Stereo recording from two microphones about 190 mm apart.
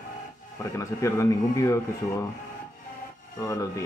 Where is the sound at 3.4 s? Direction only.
15° left (ahead or behind).